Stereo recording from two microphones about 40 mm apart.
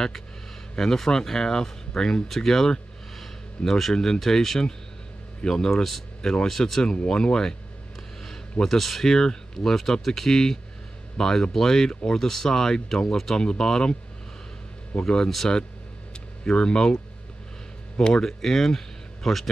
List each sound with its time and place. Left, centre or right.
0.7 s speech: centre
2.2 s a sound: centre
3.9 s speech: centre
5.7 s speech: centre
6.8 s speech: left
15.0 s speech: centre
16.4 s speech: left
18.1 s speech: centre